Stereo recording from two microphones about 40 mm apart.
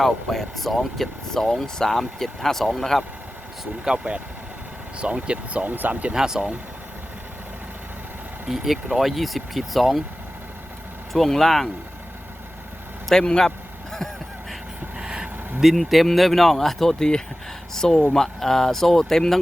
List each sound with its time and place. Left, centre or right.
0.0 s speech: centre
3.9 s speech: right
5.6 s speech: right
6.1 s speech: centre
8.4 s speech: centre
11.1 s speech: centre
13.1 s speech: centre
14.9 s vehicle: right
15.6 s speech: centre
17.0 s speech: centre